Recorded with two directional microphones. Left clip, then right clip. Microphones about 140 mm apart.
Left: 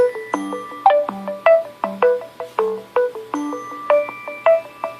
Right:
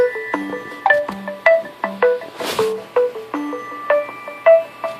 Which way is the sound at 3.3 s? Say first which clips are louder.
Even; 10° left (ahead or behind).